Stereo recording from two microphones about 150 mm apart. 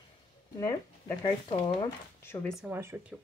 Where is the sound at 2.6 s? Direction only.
15° right (ahead or behind).